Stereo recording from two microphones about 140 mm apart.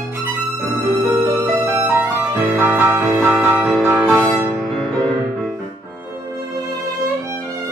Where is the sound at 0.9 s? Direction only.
30° right (ahead or behind); by 4.1 s 10° right (ahead or behind).